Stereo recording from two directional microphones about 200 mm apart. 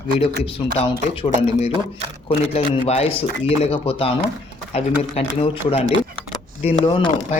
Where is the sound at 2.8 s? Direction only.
30° left (ahead or behind).